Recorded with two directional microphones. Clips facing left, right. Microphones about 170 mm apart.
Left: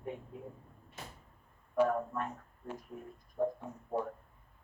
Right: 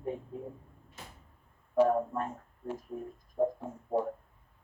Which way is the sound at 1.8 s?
30° right (ahead or behind).